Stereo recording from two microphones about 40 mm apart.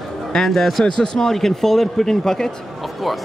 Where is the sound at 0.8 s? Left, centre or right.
Centre.